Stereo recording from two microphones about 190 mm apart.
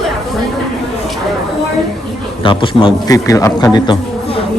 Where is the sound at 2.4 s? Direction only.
25° left (ahead or behind).